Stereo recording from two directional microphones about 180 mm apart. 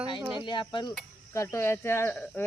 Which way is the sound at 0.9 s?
15° left (ahead or behind).